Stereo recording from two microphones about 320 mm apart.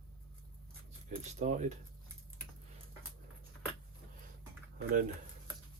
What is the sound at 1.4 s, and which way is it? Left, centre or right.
Speech, right.